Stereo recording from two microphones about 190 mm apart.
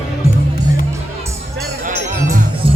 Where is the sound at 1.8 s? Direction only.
40° right (ahead or behind).